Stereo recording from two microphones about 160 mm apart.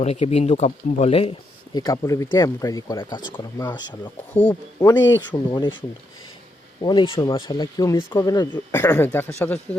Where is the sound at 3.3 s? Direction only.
15° left (ahead or behind).